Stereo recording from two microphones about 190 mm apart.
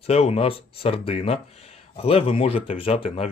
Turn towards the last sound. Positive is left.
turn(degrees=30)  # may be behind; listen again after turning